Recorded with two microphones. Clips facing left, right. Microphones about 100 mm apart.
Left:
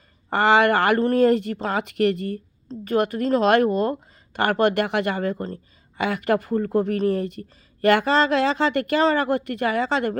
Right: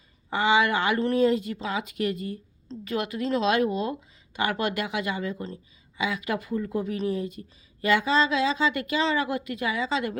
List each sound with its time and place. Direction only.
0.3 s speech: 65° left (ahead or behind)